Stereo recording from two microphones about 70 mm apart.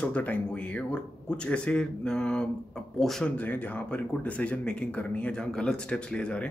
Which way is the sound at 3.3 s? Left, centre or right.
Left.